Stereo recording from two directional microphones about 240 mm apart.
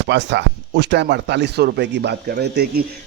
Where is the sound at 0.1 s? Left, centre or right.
Right.